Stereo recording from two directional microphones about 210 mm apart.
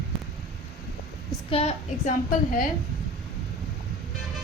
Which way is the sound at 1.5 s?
30° left (ahead or behind).